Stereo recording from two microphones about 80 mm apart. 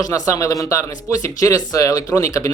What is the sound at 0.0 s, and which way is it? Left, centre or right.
Speech, left.